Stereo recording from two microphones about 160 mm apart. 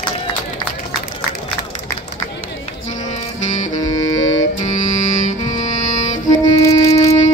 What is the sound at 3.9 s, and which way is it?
Music, 20° left (ahead or behind).